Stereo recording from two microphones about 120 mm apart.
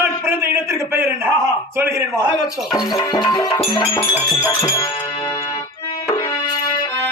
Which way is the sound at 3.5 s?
45° left (ahead or behind).